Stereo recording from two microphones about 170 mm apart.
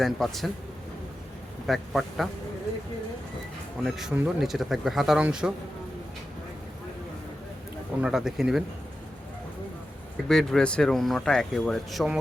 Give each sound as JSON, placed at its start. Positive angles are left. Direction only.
{"t": 0.0, "sound": "speech", "side_deg": 0}
{"t": 1.6, "sound": "speech", "side_deg": 0}
{"t": 3.8, "sound": "speech", "side_deg": 0}
{"t": 8.0, "sound": "speech", "side_deg": -5}
{"t": 10.2, "sound": "speech", "side_deg": 5}